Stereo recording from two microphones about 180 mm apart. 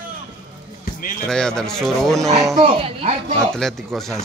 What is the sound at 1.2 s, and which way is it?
Speech, 5° left (ahead or behind).